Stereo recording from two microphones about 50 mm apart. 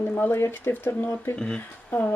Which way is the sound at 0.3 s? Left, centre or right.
Left.